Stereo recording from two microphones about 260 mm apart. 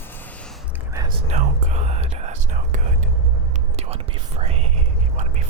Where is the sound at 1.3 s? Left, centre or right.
Right.